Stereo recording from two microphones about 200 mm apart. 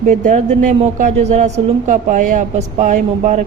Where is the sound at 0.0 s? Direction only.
40° right (ahead or behind).